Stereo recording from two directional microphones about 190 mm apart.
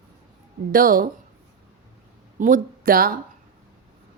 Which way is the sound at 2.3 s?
45° right (ahead or behind).